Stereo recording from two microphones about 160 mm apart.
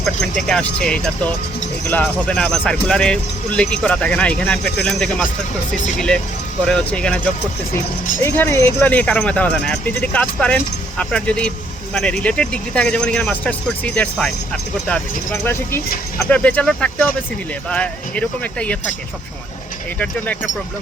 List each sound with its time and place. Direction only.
0.0 s speech: 5° left (ahead or behind)
5.7 s speech: 50° left (ahead or behind)
6.7 s speech: 5° left (ahead or behind)
8.2 s speech: 15° left (ahead or behind)